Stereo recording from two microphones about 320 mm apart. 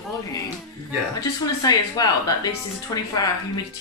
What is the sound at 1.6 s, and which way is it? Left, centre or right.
Speech, centre.